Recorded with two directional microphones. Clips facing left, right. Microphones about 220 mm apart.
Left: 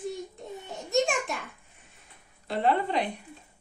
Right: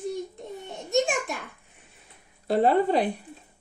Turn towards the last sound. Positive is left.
turn(degrees=-40)  # may be behind; listen again after turning